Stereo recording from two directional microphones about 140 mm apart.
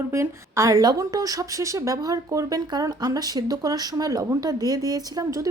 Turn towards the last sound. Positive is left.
turn(degrees=-25)  # may be behind; listen again after turning